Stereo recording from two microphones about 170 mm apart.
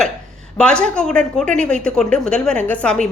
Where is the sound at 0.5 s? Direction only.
5° left (ahead or behind).